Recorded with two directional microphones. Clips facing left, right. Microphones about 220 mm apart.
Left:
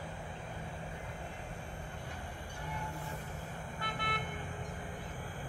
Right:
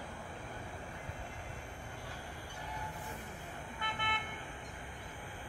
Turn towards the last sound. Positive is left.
turn(degrees=40)  # may be behind; listen again after turning